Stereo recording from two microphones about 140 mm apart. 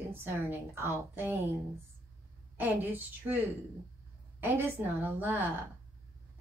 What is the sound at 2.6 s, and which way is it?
A woman's voice, 15° right (ahead or behind).